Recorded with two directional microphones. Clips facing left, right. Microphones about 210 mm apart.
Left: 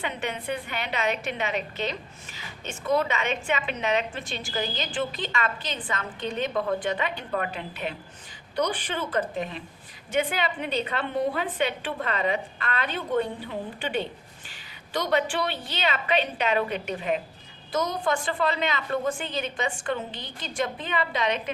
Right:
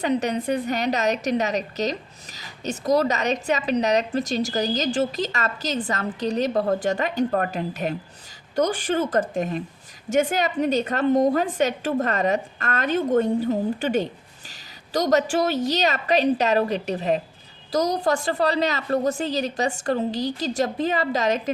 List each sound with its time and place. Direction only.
0.0 s a woman's voice: 40° right (ahead or behind)